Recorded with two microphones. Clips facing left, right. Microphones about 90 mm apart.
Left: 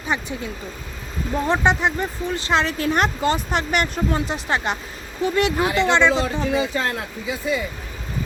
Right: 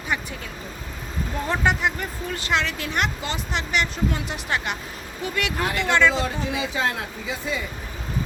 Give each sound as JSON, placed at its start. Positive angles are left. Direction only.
{"t": 0.1, "sound": "speech", "side_deg": 25}
{"t": 1.5, "sound": "speech", "side_deg": 25}
{"t": 4.3, "sound": "speech", "side_deg": 30}
{"t": 6.2, "sound": "speech", "side_deg": 0}